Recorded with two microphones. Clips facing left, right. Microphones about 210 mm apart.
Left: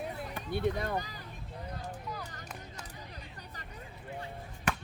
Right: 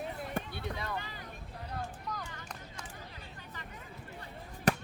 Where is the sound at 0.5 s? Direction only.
50° left (ahead or behind).